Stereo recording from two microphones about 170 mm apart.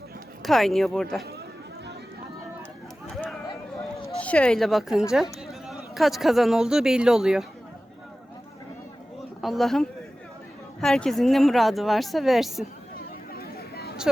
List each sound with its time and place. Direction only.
0.4 s speech: centre (ahead or behind)
4.2 s a man's voice: 5° left (ahead or behind)
9.4 s speech: centre (ahead or behind)
13.3 s vehicle: 65° left (ahead or behind)